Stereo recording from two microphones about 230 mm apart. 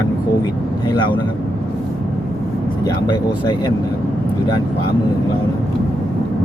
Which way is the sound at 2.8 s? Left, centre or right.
Centre.